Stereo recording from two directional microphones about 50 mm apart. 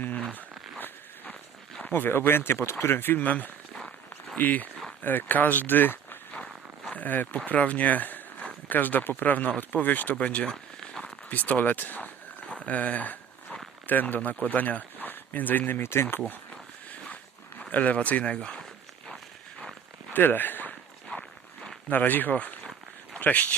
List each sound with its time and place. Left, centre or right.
0.8 s zipper: left
1.9 s speech: left
6.3 s a sound: left
7.4 s speech: left
10.2 s a sound: left
11.3 s speech: left
12.5 s a sound: left
13.8 s speech: left
17.6 s speech: left
18.3 s speech: centre
20.1 s a sound: left
21.8 s speech: left